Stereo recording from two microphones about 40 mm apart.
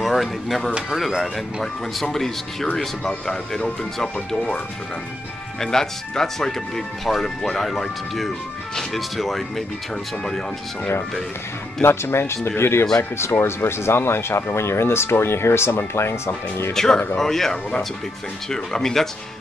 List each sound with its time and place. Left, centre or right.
0.0 s speech: centre
0.7 s speech: centre
0.9 s speech: centre
2.1 s speech: centre
5.6 s speech: centre
11.8 s speech: left
16.7 s speech: centre